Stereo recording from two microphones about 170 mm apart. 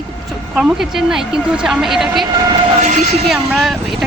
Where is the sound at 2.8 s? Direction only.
45° right (ahead or behind).